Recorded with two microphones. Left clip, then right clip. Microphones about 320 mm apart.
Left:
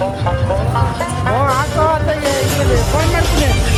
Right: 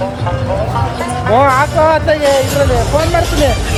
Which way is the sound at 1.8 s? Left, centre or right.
Right.